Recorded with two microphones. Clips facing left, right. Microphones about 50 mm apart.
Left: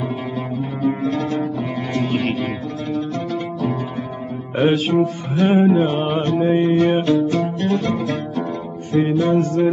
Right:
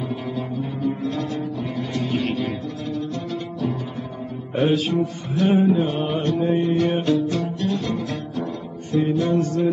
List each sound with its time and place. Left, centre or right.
1.1 s music: left
4.6 s mantra: left
6.1 s music: left
8.9 s music: left